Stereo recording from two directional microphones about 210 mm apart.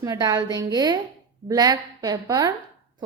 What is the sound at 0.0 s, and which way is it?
A woman's voice, 15° right (ahead or behind).